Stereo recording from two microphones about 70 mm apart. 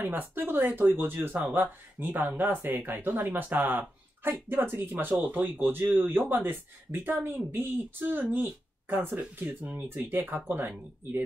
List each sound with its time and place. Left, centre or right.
0.0 s speech: right